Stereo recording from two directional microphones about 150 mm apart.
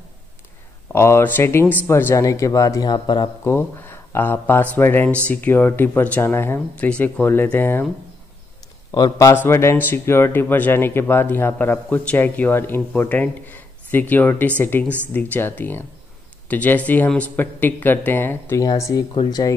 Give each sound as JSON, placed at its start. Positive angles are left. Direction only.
{"t": 0.9, "sound": "speech", "side_deg": 15}
{"t": 3.4, "sound": "speech", "side_deg": 15}
{"t": 8.9, "sound": "a man's voice", "side_deg": 25}
{"t": 9.3, "sound": "a man's voice", "side_deg": 15}